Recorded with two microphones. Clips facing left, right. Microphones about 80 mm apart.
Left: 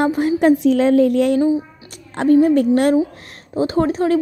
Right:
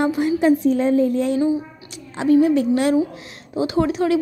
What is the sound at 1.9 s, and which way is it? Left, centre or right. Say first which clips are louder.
A woman's voice: left 2 dB; left.